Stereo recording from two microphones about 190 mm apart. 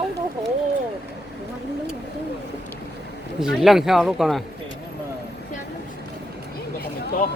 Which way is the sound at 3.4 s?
Centre (ahead or behind).